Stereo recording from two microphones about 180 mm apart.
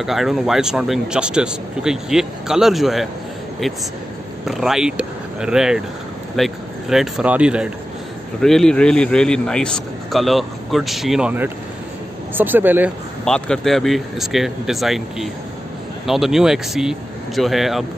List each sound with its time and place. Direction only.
0.0 s a man's voice: centre (ahead or behind)
4.5 s a man's voice: centre (ahead or behind)
13.2 s a man's voice: 5° left (ahead or behind)